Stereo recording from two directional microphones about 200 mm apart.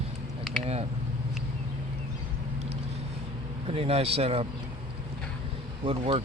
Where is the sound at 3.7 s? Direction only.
30° right (ahead or behind).